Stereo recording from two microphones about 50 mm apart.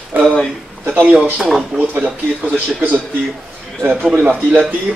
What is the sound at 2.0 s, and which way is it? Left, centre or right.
Speech, right.